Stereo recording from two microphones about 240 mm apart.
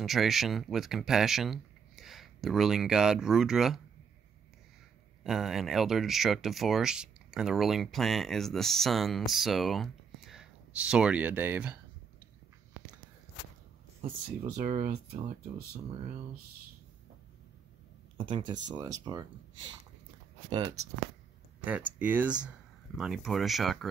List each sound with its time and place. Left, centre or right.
0.0 s speech: centre
5.2 s speech: centre
14.4 s speech: right
18.1 s speech: right
20.4 s speech: right
21.5 s speech: centre